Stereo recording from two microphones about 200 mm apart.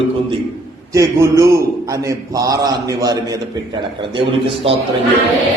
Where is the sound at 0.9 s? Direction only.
15° right (ahead or behind).